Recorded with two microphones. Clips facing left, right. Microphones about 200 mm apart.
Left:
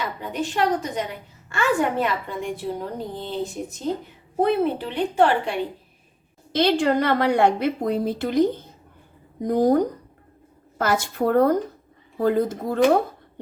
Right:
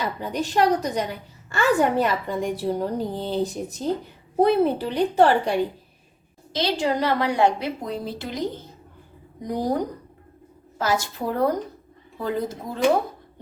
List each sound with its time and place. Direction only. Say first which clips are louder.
0.0 s a woman's voice: right 1 dB; 35° right (ahead or behind)
6.5 s a woman's voice: left 4 dB; 55° left (ahead or behind)